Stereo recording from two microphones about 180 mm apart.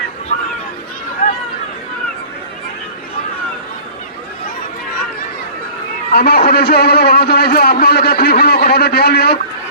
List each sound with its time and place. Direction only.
6.1 s a man's voice: 55° left (ahead or behind)